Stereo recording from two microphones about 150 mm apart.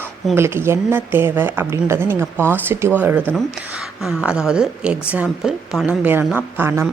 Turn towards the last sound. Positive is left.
turn(degrees=-15)  # may be behind; listen again after turning